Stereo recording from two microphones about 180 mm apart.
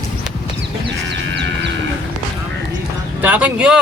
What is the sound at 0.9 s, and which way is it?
Music, 75° right (ahead or behind).